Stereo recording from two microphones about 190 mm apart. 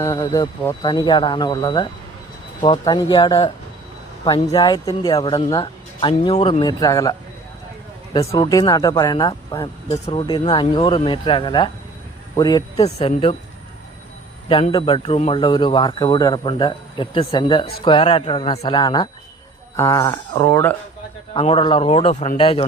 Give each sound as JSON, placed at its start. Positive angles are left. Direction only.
{"t": 0.0, "sound": "speech", "side_deg": 15}
{"t": 4.5, "sound": "speech", "side_deg": 20}
{"t": 12.8, "sound": "a woman's voice", "side_deg": 35}
{"t": 14.5, "sound": "speech", "side_deg": 25}
{"t": 21.3, "sound": "speech", "side_deg": 30}